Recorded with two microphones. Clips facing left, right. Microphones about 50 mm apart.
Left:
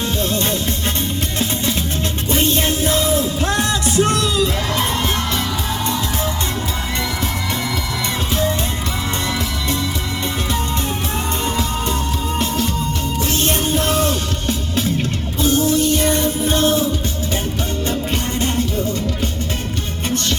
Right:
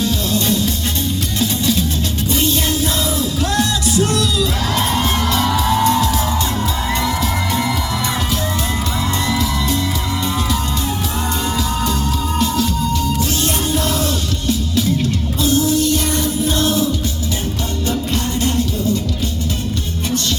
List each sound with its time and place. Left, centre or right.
0.0 s music: left
12.4 s music: left
15.4 s music: left
18.1 s music: left